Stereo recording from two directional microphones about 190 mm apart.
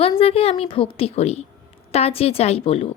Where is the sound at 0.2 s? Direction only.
30° left (ahead or behind).